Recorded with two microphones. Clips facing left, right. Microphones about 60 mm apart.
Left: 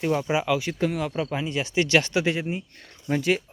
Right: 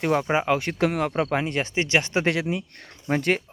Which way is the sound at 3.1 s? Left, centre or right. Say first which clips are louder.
Right 1 dB; right.